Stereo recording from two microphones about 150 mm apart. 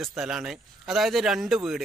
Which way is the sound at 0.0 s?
5° right (ahead or behind).